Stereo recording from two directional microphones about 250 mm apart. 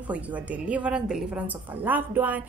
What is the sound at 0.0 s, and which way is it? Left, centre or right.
A woman's voice, centre.